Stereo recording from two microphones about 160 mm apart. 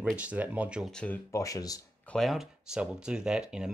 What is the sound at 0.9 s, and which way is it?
Speech, 5° left (ahead or behind).